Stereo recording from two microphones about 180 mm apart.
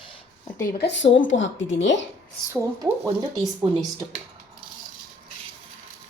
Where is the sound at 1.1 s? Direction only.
90° left.